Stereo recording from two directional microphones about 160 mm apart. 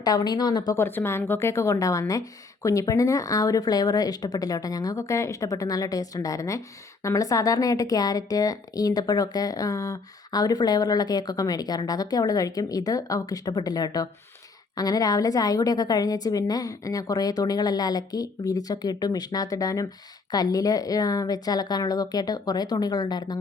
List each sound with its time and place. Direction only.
0.0 s speech: 25° left (ahead or behind)